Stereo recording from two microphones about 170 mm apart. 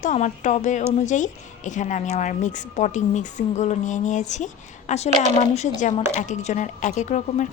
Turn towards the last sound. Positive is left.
turn(degrees=45)  # may be behind; listen again after turning